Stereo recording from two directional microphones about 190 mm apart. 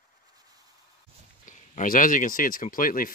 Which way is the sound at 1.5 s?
45° left (ahead or behind).